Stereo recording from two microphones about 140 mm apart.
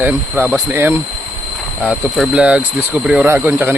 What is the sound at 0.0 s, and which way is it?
Speech, 15° right (ahead or behind).